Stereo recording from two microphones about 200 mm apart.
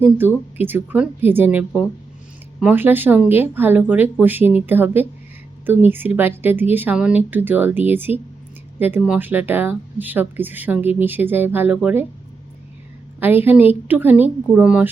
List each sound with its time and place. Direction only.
0.0 s speech: 10° right (ahead or behind)
13.1 s speech: 10° right (ahead or behind)